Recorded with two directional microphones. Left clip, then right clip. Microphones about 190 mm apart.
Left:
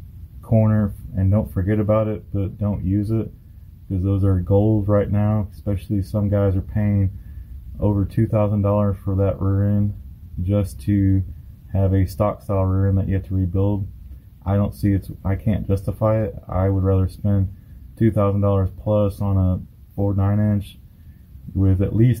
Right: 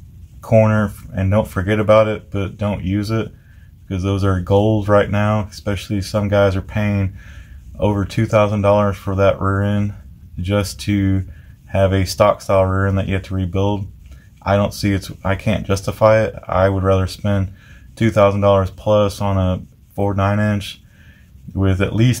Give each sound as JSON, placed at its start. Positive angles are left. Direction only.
{"t": 0.4, "sound": "speech", "side_deg": -10}
{"t": 8.3, "sound": "speech", "side_deg": -5}
{"t": 9.4, "sound": "speech", "side_deg": -15}
{"t": 10.5, "sound": "speech", "side_deg": -5}